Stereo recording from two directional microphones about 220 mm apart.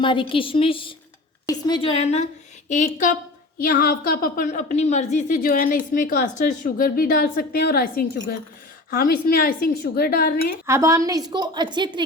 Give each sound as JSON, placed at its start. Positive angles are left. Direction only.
{"t": 0.0, "sound": "a woman's voice", "side_deg": 20}
{"t": 10.7, "sound": "a woman's voice", "side_deg": -15}